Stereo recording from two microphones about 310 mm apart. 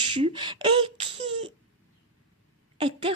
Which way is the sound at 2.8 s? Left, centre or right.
Centre.